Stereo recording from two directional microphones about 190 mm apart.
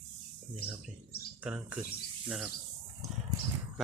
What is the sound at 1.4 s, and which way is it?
Speech, 10° right (ahead or behind).